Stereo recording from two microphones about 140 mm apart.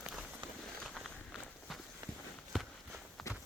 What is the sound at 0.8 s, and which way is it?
Walk, 5° left (ahead or behind).